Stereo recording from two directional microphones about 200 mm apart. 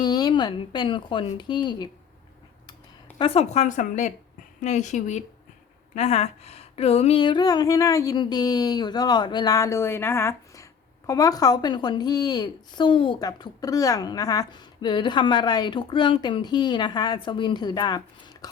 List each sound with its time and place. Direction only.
0.0 s speech: 20° left (ahead or behind)
3.2 s speech: 30° left (ahead or behind)